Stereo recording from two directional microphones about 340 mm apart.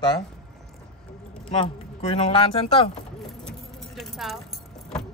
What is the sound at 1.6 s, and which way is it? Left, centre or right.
Speech, centre.